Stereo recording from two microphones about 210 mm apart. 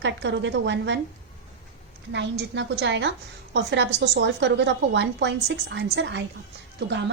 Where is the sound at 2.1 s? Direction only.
55° right (ahead or behind).